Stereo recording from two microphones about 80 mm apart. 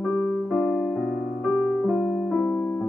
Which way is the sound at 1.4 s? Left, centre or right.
Centre.